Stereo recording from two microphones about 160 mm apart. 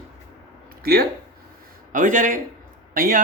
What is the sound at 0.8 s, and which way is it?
Speech, 70° right (ahead or behind).